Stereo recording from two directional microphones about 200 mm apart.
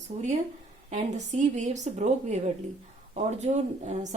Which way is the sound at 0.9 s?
35° right (ahead or behind).